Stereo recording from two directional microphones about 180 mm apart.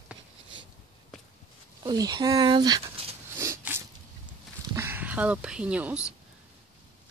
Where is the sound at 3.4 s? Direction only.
15° right (ahead or behind).